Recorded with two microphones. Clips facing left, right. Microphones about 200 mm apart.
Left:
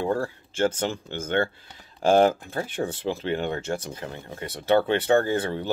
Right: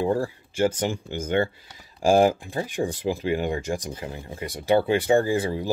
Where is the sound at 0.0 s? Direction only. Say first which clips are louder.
Right 2 dB; 15° right (ahead or behind).